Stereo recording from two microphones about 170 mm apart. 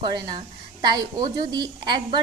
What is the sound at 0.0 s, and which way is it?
A woman's voice, 25° right (ahead or behind).